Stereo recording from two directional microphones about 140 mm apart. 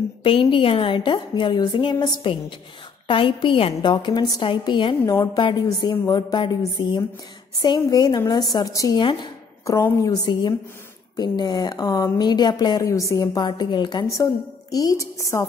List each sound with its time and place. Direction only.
0.2 s a woman's voice: 40° left (ahead or behind)
14.0 s a woman's voice: 25° left (ahead or behind)